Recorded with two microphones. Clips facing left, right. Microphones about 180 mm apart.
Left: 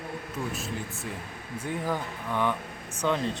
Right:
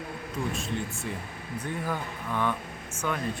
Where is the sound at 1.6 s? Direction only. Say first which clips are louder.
Left 2 dB; 15° left (ahead or behind).